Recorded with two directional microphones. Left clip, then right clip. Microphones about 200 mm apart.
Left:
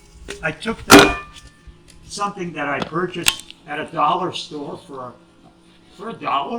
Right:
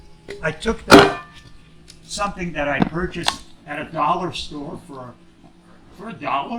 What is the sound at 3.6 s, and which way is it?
Speech, 25° right (ahead or behind).